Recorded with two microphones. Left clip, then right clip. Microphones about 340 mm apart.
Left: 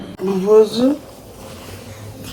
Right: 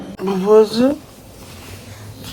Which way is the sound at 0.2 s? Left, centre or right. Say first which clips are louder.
Even; centre.